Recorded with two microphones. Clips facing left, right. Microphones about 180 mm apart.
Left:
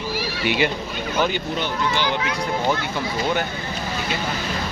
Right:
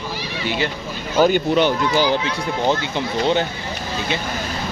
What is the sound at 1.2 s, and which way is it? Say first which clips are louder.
Speech: right 7 dB; 50° right (ahead or behind).